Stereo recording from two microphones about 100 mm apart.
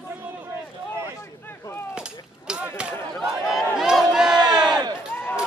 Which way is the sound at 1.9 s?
10° right (ahead or behind).